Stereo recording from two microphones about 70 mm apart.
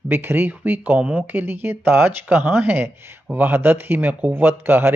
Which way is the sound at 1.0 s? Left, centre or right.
Centre.